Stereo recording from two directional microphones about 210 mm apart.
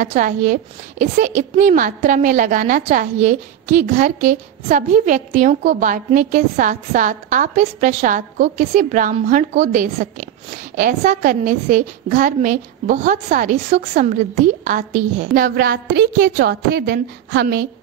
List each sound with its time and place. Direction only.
0.0 s a woman's voice: 40° right (ahead or behind)